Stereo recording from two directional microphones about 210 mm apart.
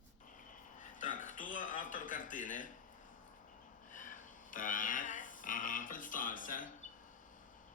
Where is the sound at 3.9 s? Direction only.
40° left (ahead or behind).